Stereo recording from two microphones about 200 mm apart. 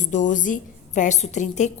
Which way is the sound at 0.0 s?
40° left (ahead or behind).